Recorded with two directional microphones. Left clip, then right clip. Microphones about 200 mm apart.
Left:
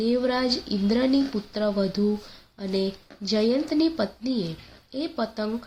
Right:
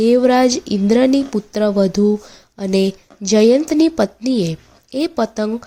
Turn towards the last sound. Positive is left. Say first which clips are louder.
# right 10 dB
turn(degrees=-45)  # may be behind; listen again after turning